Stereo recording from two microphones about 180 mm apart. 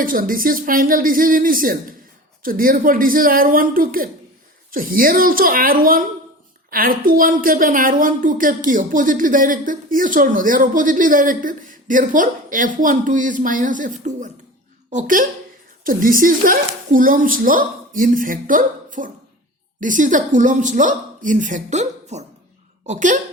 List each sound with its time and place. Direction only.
0.0 s a woman's voice: 50° right (ahead or behind)